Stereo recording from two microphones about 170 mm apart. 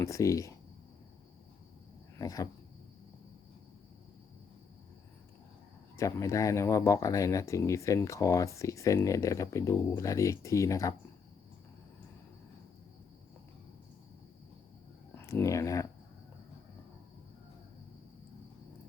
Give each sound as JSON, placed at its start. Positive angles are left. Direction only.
{"t": 0.0, "sound": "speech", "side_deg": 20}
{"t": 2.1, "sound": "cricket", "side_deg": 20}
{"t": 6.0, "sound": "speech", "side_deg": 20}
{"t": 15.1, "sound": "speech", "side_deg": 15}